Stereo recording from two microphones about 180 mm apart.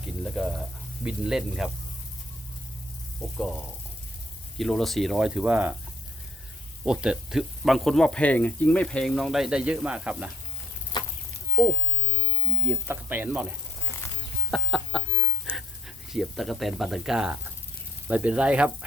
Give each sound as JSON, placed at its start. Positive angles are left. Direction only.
{"t": 0.0, "sound": "speech", "side_deg": 0}
{"t": 3.3, "sound": "speech", "side_deg": 0}
{"t": 6.8, "sound": "speech", "side_deg": -5}
{"t": 10.9, "sound": "a sound", "side_deg": 25}
{"t": 12.6, "sound": "speech", "side_deg": -10}
{"t": 14.5, "sound": "chicken", "side_deg": 0}
{"t": 16.0, "sound": "speech", "side_deg": 0}